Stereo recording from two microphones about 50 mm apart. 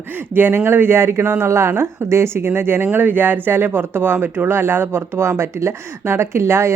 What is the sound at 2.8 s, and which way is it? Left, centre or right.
Speech, right.